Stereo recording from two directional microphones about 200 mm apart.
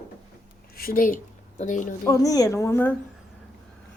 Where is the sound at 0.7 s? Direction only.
45° left (ahead or behind).